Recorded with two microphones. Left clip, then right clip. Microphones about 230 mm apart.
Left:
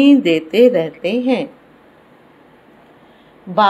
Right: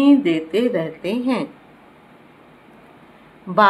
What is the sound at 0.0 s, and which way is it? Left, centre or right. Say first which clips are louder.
A woman's voice: left 4 dB; centre.